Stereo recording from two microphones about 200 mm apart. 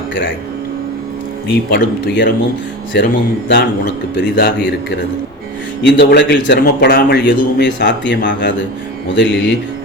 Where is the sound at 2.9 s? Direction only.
55° left (ahead or behind).